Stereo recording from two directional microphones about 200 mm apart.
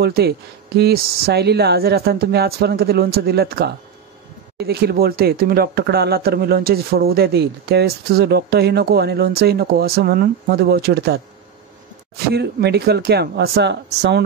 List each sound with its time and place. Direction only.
0.0 s speech: 55° right (ahead or behind)
12.4 s speech: 55° right (ahead or behind)